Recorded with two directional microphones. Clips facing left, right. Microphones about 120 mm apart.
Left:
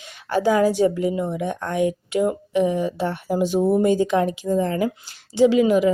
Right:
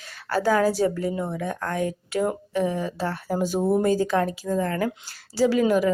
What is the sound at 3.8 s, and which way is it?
Speech, 35° right (ahead or behind).